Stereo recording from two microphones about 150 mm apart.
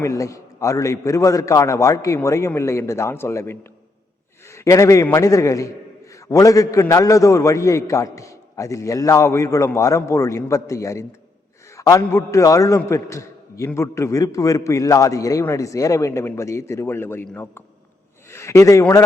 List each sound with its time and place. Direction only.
0.0 s a man's voice: 20° left (ahead or behind)